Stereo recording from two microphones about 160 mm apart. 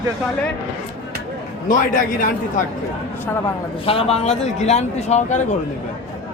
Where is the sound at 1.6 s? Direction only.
55° left (ahead or behind).